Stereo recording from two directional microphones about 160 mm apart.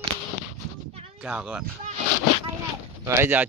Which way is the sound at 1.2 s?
5° right (ahead or behind).